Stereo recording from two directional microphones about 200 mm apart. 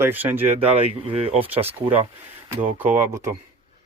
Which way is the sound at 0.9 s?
30° right (ahead or behind).